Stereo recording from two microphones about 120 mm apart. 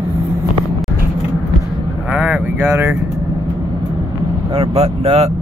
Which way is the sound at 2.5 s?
15° right (ahead or behind).